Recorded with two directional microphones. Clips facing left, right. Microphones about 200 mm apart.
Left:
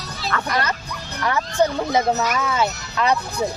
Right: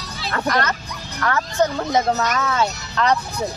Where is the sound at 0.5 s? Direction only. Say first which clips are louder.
Right 1 dB; 10° left (ahead or behind).